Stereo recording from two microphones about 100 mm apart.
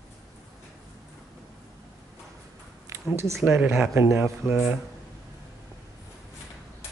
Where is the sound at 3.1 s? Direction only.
30° right (ahead or behind).